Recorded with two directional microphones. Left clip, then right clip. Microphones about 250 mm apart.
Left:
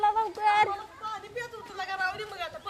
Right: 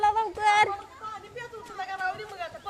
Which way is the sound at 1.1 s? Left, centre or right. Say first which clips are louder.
Left 3 dB; left.